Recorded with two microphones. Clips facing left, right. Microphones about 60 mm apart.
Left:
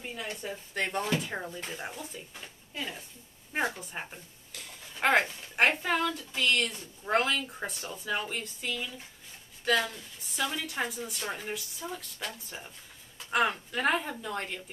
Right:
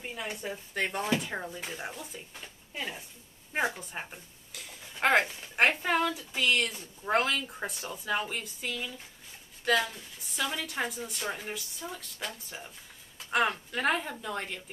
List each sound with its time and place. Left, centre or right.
0.0 s a woman's voice: centre
2.7 s a woman's voice: centre
3.5 s a woman's voice: centre